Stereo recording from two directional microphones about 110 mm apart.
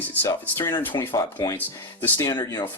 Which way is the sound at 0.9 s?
35° left (ahead or behind).